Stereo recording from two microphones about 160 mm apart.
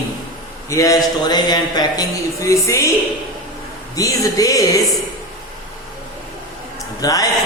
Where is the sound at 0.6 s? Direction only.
20° left (ahead or behind).